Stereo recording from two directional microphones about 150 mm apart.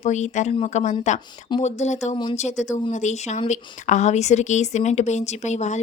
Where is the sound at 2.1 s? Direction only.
35° left (ahead or behind).